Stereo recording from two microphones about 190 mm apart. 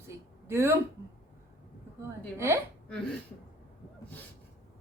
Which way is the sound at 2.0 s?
15° right (ahead or behind).